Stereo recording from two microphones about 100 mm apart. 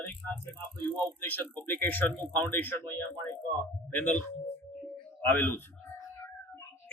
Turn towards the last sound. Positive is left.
turn(degrees=20)  # may be behind; listen again after turning